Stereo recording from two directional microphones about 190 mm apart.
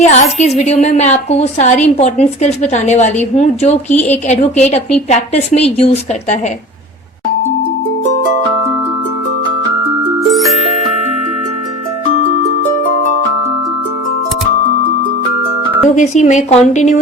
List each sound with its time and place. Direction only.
0.0 s a woman's voice: 40° left (ahead or behind)
10.2 s music: centre (ahead or behind)
16.0 s a woman's voice: 40° left (ahead or behind)